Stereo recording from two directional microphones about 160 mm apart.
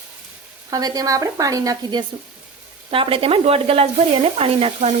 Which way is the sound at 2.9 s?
35° right (ahead or behind).